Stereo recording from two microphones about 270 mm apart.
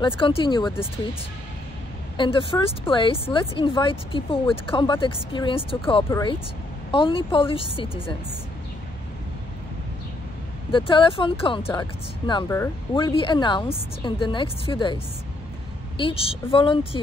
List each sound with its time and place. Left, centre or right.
0.0 s speech: centre
2.1 s speech: centre
10.7 s speech: centre
16.0 s speech: left